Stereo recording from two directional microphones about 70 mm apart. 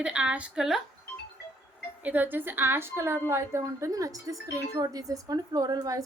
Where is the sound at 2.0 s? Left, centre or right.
Right.